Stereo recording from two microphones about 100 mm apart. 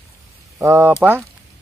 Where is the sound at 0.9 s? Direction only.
10° right (ahead or behind).